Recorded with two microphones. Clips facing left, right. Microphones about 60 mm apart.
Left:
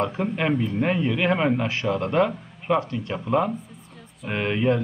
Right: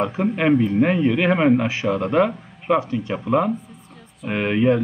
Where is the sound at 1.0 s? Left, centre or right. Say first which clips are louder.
Right 5 dB; right.